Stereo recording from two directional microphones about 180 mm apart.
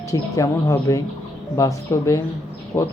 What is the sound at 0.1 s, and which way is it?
Speech, 20° left (ahead or behind).